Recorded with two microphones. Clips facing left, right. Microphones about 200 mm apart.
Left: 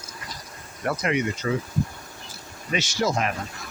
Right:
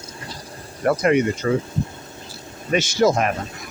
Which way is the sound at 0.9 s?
50° right (ahead or behind).